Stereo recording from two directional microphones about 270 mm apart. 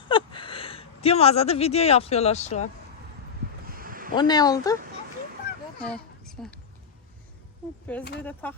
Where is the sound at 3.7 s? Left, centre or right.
Right.